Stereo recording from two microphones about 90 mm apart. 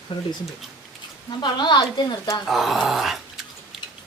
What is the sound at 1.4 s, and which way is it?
Speech, 55° left (ahead or behind).